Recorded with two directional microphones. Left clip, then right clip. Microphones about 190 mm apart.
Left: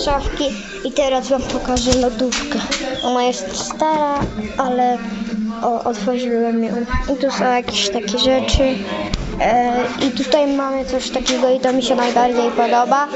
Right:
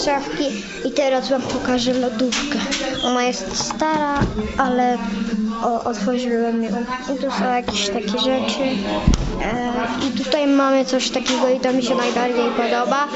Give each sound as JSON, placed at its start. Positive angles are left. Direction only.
{"t": 0.9, "sound": "speech", "side_deg": 5}
{"t": 3.8, "sound": "speech", "side_deg": 0}
{"t": 7.2, "sound": "a woman's voice", "side_deg": 15}